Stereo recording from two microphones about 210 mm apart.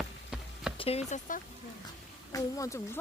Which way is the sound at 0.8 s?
30° left (ahead or behind).